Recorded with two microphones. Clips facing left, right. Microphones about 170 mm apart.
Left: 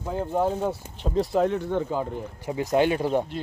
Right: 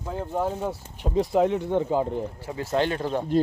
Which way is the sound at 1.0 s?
15° right (ahead or behind).